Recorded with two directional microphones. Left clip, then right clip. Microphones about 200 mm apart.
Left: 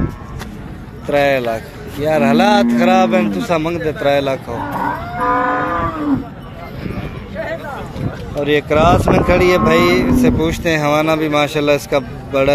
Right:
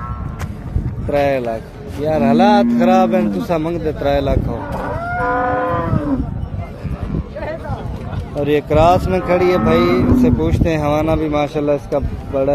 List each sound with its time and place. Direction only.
1.1 s a man's voice: 5° right (ahead or behind)
5.2 s moo: 40° right (ahead or behind)
8.4 s speech: 15° right (ahead or behind); by 12.4 s 5° left (ahead or behind)